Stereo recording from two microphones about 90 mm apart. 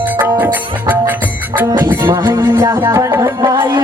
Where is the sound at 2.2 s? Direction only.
25° right (ahead or behind).